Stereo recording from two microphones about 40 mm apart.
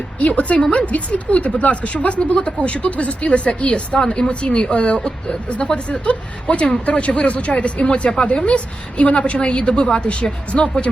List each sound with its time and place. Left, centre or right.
0.2 s a woman's voice: left